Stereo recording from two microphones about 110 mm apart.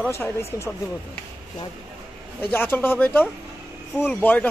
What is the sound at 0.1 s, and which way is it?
Speech, 25° left (ahead or behind).